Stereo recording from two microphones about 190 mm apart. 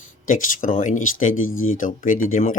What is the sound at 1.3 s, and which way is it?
Speech, 90° left.